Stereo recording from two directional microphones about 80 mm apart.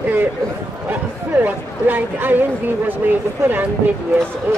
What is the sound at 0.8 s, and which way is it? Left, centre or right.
Speech, right.